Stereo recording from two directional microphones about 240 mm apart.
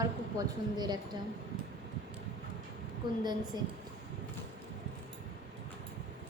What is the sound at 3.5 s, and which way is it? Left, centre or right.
Speech, centre.